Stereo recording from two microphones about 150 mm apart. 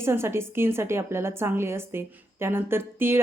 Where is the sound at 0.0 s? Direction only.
15° right (ahead or behind).